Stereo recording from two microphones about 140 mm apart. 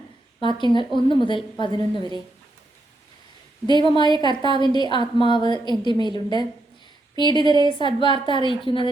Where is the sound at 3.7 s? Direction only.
35° left (ahead or behind).